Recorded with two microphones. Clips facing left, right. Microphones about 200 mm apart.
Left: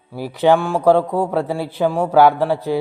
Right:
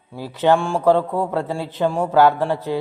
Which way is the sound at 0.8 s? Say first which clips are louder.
Left 2 dB; 15° left (ahead or behind).